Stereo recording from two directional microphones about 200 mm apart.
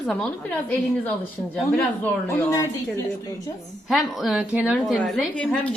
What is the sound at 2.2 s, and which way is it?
Speech, 15° left (ahead or behind).